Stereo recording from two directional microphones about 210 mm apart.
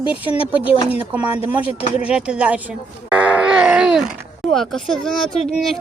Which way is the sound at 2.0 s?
5° right (ahead or behind).